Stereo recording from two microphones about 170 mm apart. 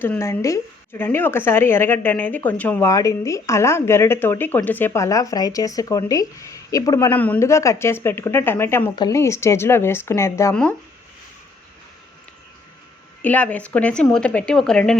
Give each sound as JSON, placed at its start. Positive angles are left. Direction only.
{"t": 0.0, "sound": "speech", "side_deg": 15}
{"t": 10.5, "sound": "speech", "side_deg": 5}
{"t": 13.2, "sound": "speech", "side_deg": 10}